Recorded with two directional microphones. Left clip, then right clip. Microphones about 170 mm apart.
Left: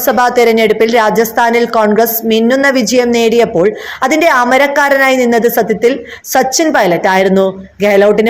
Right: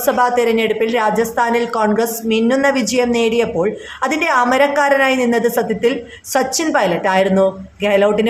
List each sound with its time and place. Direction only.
0.0 s speech: 30° left (ahead or behind)